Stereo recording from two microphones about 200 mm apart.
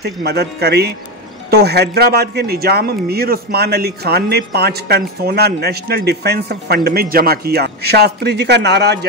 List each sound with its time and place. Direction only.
0.0 s a man's voice: 55° right (ahead or behind)